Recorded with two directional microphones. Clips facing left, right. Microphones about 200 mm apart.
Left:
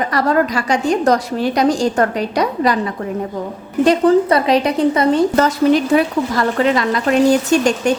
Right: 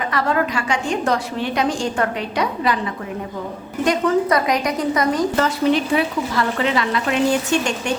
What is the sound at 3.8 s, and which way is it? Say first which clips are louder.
A woman's voice: left 6 dB; 30° left (ahead or behind).